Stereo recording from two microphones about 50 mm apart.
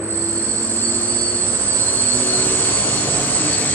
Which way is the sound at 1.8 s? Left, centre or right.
Left.